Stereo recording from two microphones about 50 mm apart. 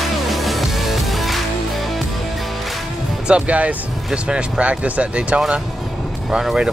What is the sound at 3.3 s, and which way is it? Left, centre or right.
Speech, right.